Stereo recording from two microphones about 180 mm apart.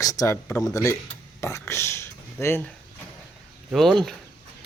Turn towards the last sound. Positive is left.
turn(degrees=0)  # may be behind; listen again after turning